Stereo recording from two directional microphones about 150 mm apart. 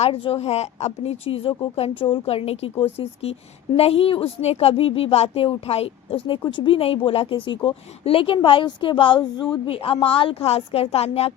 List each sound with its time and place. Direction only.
0.0 s a woman's voice: 45° left (ahead or behind)